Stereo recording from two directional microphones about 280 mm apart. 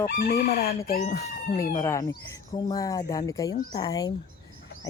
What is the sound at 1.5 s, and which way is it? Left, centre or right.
Speech, centre.